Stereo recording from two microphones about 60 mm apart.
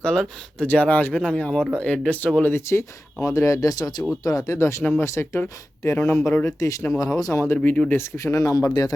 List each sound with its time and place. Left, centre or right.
0.0 s speech: centre
0.6 s speech: left
2.5 s speech: left
3.2 s speech: left
4.5 s speech: left
4.8 s speech: left
5.0 s speech: left
6.4 s speech: left
7.0 s speech: left
7.5 s speech: left
7.9 s speech: left